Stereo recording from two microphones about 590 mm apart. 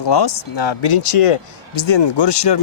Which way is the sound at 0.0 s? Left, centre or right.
Left.